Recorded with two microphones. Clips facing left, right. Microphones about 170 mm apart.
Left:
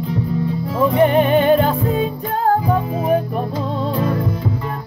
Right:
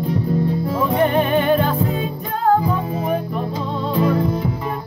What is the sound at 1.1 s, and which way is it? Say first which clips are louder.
Music: left 3 dB; 25° left (ahead or behind).